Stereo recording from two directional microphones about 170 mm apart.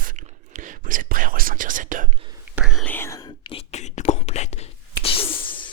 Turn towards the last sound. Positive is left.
turn(degrees=30)  # may be behind; listen again after turning